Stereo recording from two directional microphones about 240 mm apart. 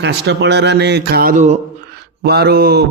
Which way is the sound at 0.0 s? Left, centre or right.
Right.